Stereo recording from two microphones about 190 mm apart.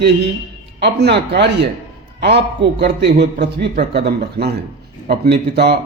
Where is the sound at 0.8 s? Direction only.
60° right (ahead or behind).